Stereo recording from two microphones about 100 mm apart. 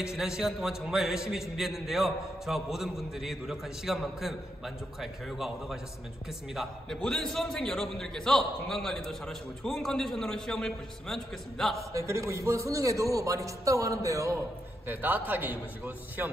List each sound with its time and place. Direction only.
0.0 s a man's voice: 5° right (ahead or behind)
11.7 s a man's voice: 30° right (ahead or behind)
14.9 s a man's voice: 20° right (ahead or behind)